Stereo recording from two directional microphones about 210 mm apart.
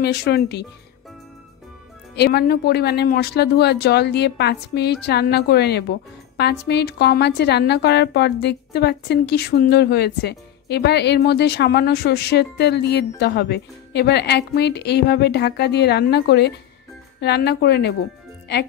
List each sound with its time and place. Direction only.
0.0 s speech: 50° left (ahead or behind)
2.1 s speech: 50° left (ahead or behind)